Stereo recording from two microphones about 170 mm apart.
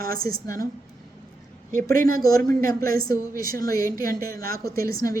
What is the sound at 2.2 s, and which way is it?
A woman's voice, 20° left (ahead or behind).